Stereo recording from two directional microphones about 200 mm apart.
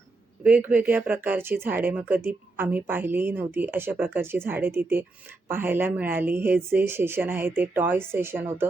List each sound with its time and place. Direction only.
0.4 s speech: 10° right (ahead or behind)